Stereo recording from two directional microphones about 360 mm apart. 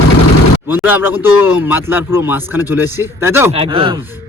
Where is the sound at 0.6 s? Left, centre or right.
Centre.